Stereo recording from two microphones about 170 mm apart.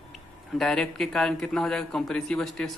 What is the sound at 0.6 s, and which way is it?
Speech, centre (ahead or behind).